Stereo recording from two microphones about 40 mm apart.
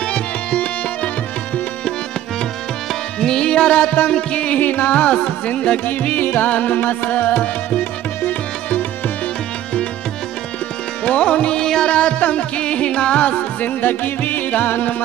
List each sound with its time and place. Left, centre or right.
0.0 s tabla: left
3.2 s music: centre
4.6 s music: left
4.9 s music: left
6.4 s music: left
6.8 s music: left
11.1 s music: left
11.6 s music: centre
11.9 s music: left
13.7 s music: left